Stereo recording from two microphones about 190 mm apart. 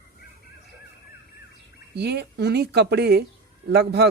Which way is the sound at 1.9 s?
60° right (ahead or behind).